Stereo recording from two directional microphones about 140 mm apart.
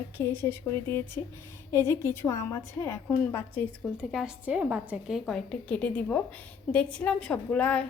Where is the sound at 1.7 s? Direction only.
20° left (ahead or behind).